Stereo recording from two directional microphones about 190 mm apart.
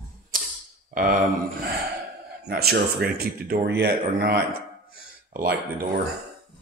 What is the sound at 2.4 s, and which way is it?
Speech, 55° right (ahead or behind).